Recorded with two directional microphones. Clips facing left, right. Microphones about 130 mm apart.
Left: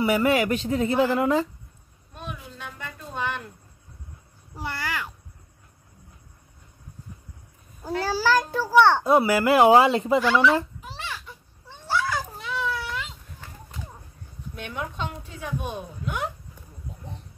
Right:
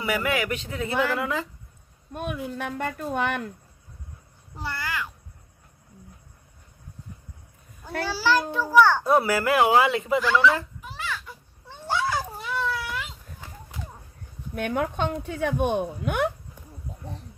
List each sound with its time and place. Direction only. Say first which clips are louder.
0.0 s speech: left 5 dB; 30° left (ahead or behind)
2.1 s a woman's voice: right 8 dB; 55° right (ahead or behind)
4.6 s speech: even; 20° left (ahead or behind)
8.0 s a child's voice: left 1 dB; 45° left (ahead or behind)
8.6 s speech: left 1 dB; 25° left (ahead or behind)
10.2 s speech: right 1 dB; 20° left (ahead or behind)
10.9 s a sound: right 2 dB; 25° left (ahead or behind)
11.6 s cat: even; 15° right (ahead or behind)
12.5 s a sound: even; centre (ahead or behind)
14.5 s a woman's voice: right 7 dB; 55° right (ahead or behind)